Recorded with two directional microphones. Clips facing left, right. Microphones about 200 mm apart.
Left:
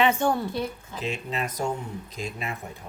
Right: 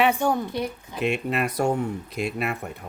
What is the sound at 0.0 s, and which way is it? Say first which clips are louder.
Speech: right 1 dB; 10° right (ahead or behind).